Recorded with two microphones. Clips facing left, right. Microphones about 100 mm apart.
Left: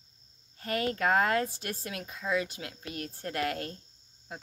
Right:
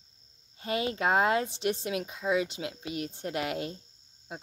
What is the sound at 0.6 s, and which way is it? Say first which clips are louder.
Speech: even; 20° right (ahead or behind).